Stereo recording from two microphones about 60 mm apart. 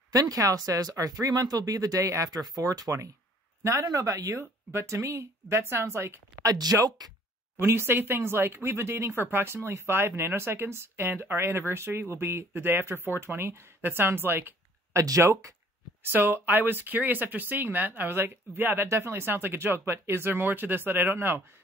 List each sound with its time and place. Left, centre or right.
0.1 s speech: right
4.4 s speech: right
6.4 s speech: right
7.5 s speech: right
14.9 s speech: right
16.0 s speech: right
18.9 s speech: right